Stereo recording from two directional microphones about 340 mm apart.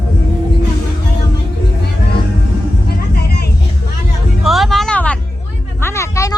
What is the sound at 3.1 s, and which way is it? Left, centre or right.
Vehicle, left.